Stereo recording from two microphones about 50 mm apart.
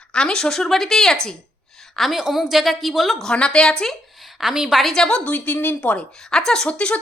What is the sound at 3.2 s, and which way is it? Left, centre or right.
Speech, centre.